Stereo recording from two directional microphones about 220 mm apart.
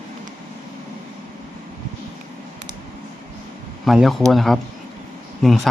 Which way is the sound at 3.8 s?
Centre (ahead or behind).